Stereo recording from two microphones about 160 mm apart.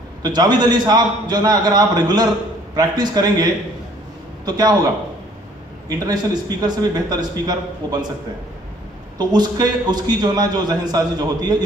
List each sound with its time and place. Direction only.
0.2 s a man's voice: 25° right (ahead or behind)
4.5 s a man's voice: 25° right (ahead or behind)
5.9 s a man's voice: 25° right (ahead or behind)
9.2 s a man's voice: 25° right (ahead or behind)